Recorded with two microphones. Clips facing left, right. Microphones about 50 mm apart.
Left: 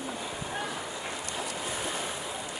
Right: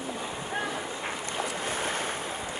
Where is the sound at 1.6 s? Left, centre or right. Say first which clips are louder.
Right 3 dB; right.